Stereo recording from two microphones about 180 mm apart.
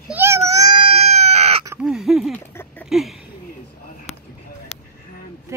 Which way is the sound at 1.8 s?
5° right (ahead or behind).